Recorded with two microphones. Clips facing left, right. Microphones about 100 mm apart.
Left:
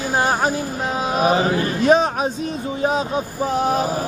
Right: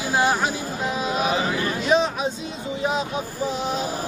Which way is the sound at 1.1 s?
45° left (ahead or behind).